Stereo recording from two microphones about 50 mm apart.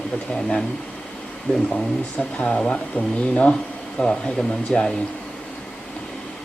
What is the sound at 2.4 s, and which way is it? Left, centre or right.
Speech, centre.